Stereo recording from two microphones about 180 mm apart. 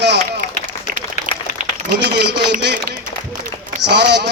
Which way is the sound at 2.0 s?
70° right (ahead or behind).